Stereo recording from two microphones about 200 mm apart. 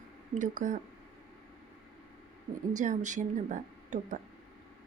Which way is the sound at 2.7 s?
40° right (ahead or behind).